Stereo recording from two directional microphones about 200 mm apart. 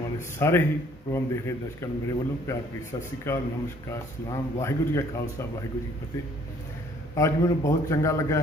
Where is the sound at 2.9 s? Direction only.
20° left (ahead or behind).